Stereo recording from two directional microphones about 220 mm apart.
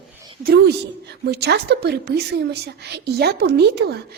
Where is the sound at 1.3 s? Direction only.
50° right (ahead or behind).